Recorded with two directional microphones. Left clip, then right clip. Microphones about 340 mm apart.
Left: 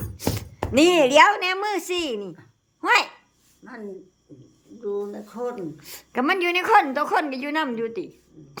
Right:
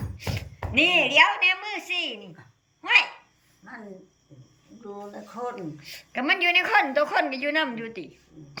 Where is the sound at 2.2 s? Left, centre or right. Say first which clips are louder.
Left 9 dB; centre.